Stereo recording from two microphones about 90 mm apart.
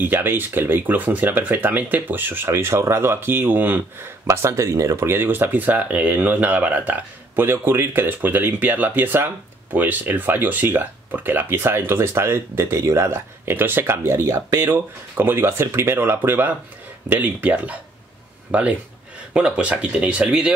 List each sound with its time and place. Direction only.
0.0 s speech: 20° right (ahead or behind)
4.3 s speech: 30° right (ahead or behind); by 20.5 s 10° right (ahead or behind)